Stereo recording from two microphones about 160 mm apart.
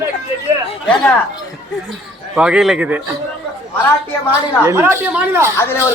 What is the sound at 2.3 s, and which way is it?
Speech, 5° right (ahead or behind).